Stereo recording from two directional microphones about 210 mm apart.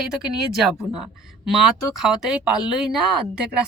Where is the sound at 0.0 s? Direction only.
5° right (ahead or behind).